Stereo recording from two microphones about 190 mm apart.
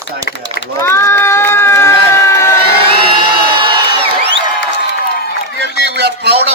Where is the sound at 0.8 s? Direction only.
15° left (ahead or behind).